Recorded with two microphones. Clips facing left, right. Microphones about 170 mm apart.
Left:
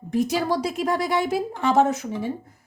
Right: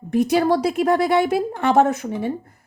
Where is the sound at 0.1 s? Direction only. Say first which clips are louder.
Right 5 dB; 60° right (ahead or behind).